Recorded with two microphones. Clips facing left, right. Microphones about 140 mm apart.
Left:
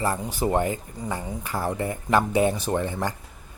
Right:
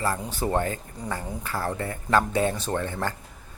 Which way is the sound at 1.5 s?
15° left (ahead or behind).